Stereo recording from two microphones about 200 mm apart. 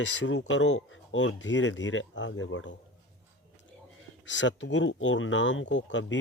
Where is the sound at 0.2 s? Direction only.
65° left (ahead or behind).